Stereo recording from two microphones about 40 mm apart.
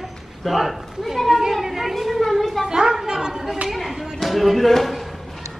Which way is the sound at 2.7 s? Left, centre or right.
Centre.